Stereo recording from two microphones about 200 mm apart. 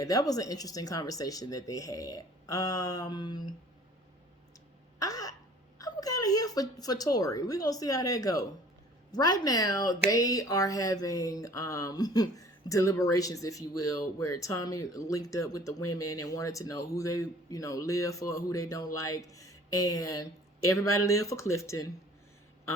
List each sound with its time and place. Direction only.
0.0 s speech: 15° left (ahead or behind)
4.9 s a sound: 15° left (ahead or behind)
5.8 s a woman's voice: 20° left (ahead or behind)